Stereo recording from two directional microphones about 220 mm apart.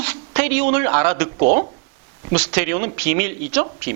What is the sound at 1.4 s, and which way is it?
Speech, 35° right (ahead or behind).